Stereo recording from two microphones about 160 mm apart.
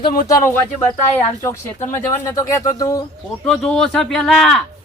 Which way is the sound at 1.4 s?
15° left (ahead or behind).